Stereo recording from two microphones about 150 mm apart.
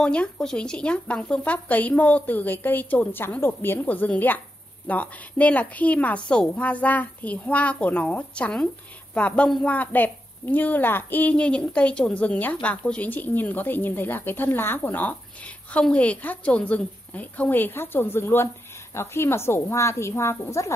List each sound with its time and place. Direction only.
0.0 s speech: 5° left (ahead or behind)